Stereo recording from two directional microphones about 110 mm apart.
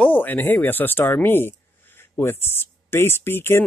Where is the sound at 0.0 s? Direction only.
15° left (ahead or behind).